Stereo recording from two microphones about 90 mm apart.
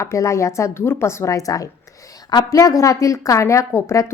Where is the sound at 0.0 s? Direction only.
35° left (ahead or behind).